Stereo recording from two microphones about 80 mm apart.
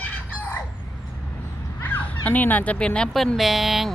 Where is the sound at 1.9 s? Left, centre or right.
Left.